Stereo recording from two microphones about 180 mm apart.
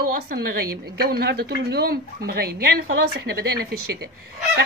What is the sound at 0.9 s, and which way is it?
Speech, 60° right (ahead or behind).